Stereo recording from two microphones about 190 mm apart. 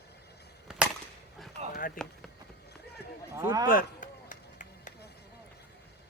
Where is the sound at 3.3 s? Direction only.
15° right (ahead or behind).